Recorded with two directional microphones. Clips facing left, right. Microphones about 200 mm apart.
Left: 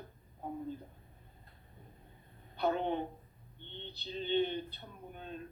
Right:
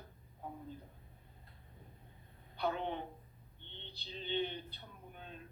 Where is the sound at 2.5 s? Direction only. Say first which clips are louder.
Left 5 dB; 45° left (ahead or behind).